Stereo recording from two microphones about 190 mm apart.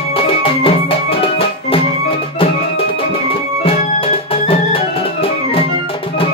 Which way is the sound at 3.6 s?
30° left (ahead or behind).